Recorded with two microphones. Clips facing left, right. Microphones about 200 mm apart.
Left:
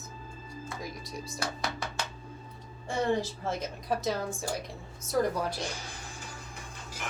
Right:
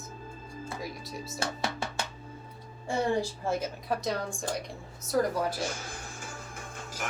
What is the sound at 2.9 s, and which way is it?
A woman's voice, 10° right (ahead or behind).